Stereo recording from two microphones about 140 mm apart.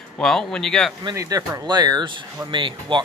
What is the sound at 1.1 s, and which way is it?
Speech, 25° right (ahead or behind).